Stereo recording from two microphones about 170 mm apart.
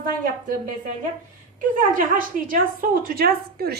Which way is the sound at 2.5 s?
60° right (ahead or behind).